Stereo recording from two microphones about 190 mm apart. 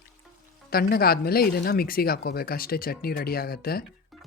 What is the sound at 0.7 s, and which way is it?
Speech, 55° left (ahead or behind).